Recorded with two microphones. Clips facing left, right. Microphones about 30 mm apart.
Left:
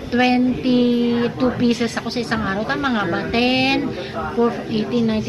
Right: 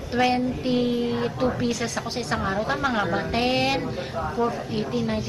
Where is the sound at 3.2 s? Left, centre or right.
Left.